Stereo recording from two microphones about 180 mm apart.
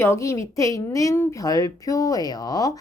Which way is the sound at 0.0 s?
15° left (ahead or behind).